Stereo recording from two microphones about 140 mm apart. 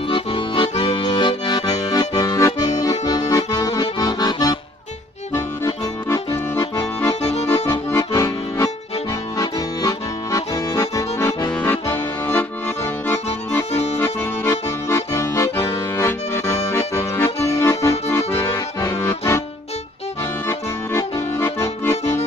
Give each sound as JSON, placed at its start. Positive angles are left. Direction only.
{"t": 0.1, "sound": "accordion", "side_deg": 40}
{"t": 20.4, "sound": "accordion", "side_deg": 20}